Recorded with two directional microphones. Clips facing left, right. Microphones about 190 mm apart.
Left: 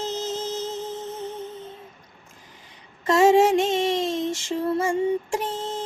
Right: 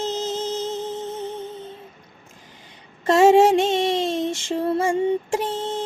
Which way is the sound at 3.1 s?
30° right (ahead or behind).